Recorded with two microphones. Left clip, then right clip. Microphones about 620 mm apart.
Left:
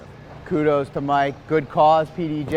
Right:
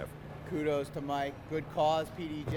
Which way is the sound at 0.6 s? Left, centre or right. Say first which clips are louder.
Left 13 dB; left.